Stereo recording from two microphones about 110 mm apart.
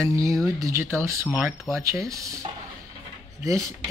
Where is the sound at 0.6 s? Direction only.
20° right (ahead or behind).